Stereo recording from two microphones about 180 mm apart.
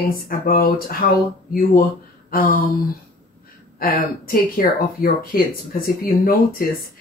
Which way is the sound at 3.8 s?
55° left (ahead or behind).